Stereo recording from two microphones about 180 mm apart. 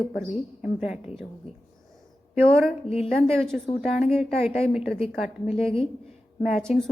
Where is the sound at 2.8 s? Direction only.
35° left (ahead or behind).